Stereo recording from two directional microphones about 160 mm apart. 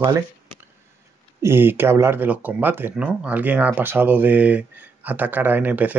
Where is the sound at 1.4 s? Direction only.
15° right (ahead or behind).